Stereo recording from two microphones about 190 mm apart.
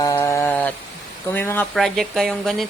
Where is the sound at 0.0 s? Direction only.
15° left (ahead or behind).